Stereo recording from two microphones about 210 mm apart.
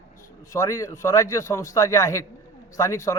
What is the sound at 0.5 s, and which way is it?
A man's voice, 15° left (ahead or behind).